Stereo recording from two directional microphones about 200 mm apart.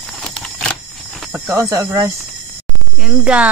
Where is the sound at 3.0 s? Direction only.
5° right (ahead or behind).